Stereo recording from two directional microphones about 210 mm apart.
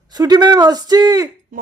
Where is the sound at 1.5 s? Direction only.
40° right (ahead or behind).